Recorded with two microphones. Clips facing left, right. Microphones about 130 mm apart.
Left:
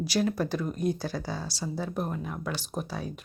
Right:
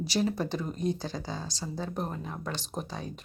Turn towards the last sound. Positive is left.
turn(degrees=5)  # may be behind; listen again after turning